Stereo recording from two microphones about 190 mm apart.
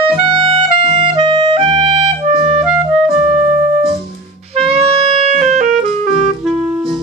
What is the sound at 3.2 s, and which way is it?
Music, 35° right (ahead or behind).